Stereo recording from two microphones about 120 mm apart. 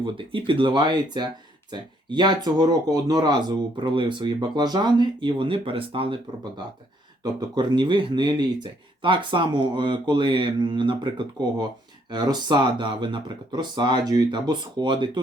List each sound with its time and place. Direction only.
0.0 s speech: 45° right (ahead or behind)
7.5 s speech: 40° right (ahead or behind)